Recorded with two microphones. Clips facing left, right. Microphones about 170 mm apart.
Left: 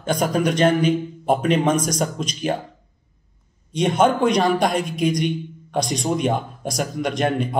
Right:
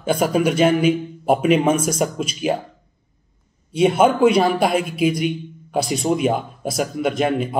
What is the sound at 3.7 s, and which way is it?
A man's voice, 5° right (ahead or behind).